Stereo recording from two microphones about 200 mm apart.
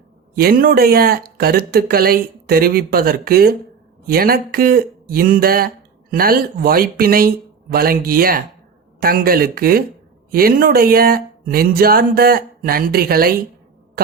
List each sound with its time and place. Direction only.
0.3 s speech: 50° right (ahead or behind)